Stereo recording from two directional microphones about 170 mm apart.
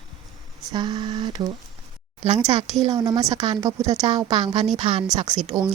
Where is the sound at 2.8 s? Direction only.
20° right (ahead or behind).